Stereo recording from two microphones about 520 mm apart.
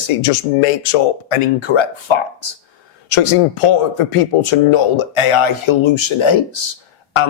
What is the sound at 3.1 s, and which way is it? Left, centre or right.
A man's voice, left.